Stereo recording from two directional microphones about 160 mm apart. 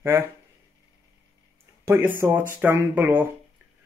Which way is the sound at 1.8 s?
15° right (ahead or behind).